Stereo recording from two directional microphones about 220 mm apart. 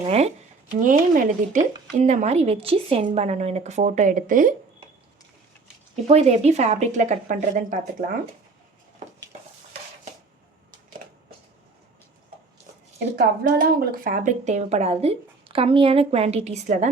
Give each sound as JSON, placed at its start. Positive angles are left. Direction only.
{"t": 0.0, "sound": "a woman's voice", "side_deg": -30}
{"t": 6.1, "sound": "a woman's voice", "side_deg": -30}
{"t": 13.1, "sound": "a woman's voice", "side_deg": -45}